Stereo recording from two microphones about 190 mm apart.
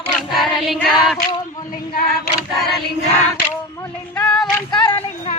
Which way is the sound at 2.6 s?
Centre (ahead or behind).